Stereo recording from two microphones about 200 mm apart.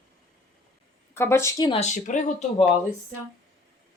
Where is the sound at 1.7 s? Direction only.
35° left (ahead or behind).